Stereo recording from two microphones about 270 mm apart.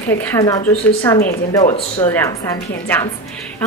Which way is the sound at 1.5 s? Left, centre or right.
Left.